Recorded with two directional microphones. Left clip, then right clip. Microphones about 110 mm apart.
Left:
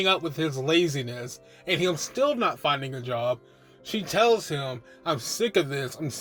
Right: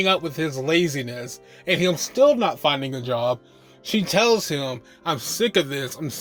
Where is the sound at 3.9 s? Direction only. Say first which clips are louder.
Right 3 dB; 90° right.